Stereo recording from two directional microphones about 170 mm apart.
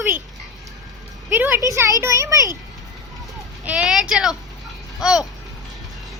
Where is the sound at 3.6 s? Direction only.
5° right (ahead or behind).